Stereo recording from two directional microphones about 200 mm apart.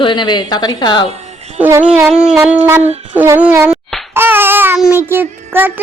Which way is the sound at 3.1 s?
10° right (ahead or behind).